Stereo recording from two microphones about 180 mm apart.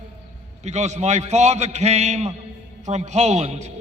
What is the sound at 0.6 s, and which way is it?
A man's voice, 40° right (ahead or behind).